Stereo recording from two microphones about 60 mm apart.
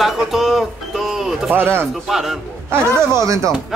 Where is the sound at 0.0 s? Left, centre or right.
Centre.